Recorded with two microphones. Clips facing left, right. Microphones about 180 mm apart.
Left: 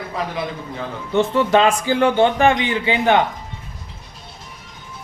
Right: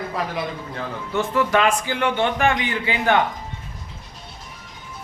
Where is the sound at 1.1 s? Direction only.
25° left (ahead or behind).